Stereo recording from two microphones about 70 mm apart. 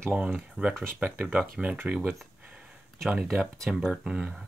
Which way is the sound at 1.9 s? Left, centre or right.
Centre.